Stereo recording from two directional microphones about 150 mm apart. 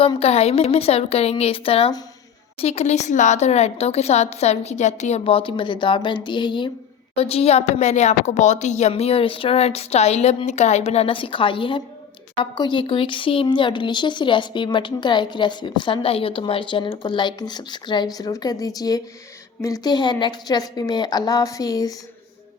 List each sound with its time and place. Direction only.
0.0 s a woman's voice: 40° left (ahead or behind); by 21.9 s 25° left (ahead or behind)